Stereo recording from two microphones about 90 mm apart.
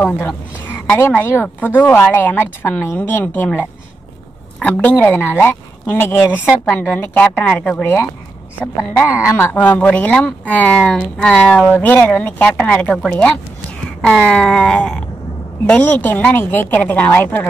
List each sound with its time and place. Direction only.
0.0 s speech: 25° left (ahead or behind)
4.6 s speech: 15° left (ahead or behind)
7.8 s speech: 25° left (ahead or behind)
9.3 s speech: 20° left (ahead or behind)
11.6 s speech: 20° left (ahead or behind)